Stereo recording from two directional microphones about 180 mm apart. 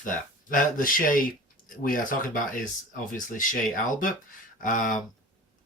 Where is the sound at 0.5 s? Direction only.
50° left (ahead or behind).